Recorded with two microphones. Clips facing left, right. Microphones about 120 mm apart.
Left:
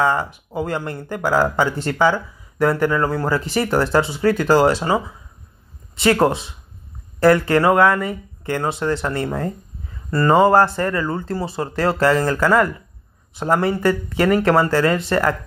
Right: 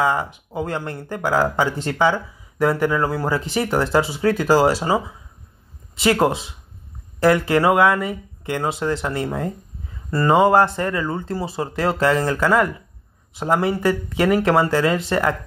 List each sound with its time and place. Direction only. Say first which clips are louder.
0.0 s speech: left 1 dB; 5° right (ahead or behind)
5.9 s speech: left 2 dB; 5° right (ahead or behind)
12.0 s speech: left 2 dB; centre (ahead or behind)